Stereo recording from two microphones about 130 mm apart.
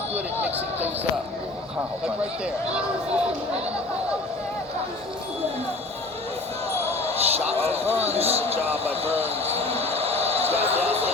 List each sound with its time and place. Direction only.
6.8 s basketball bounce: 50° right (ahead or behind)
7.9 s speech: 50° right (ahead or behind)